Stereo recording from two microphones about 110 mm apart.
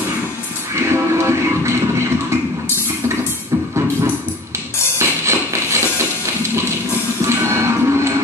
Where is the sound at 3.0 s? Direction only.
25° right (ahead or behind).